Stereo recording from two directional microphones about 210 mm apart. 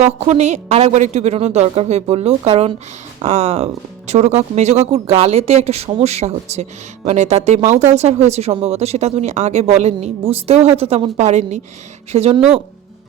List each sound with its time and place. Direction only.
0.0 s speech: 30° right (ahead or behind)